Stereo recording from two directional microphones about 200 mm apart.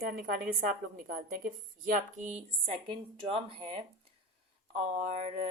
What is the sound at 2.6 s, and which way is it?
A woman's voice, 25° right (ahead or behind).